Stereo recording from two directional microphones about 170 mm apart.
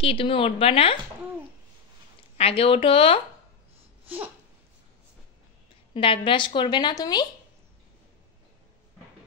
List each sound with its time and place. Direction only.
0.0 s a woman's voice: 30° left (ahead or behind)
2.3 s a woman's voice: 35° left (ahead or behind)
5.9 s a woman's voice: 30° left (ahead or behind)